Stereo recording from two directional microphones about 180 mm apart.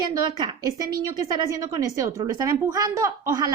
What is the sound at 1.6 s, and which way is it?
Speech, 20° right (ahead or behind).